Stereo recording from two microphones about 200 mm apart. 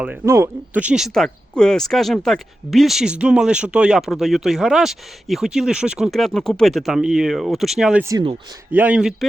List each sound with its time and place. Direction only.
0.0 s speech: 10° right (ahead or behind)
8.0 s speech: 20° right (ahead or behind)
8.7 s speech: 5° right (ahead or behind)